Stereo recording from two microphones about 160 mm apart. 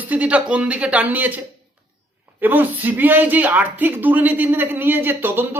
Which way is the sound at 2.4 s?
10° right (ahead or behind).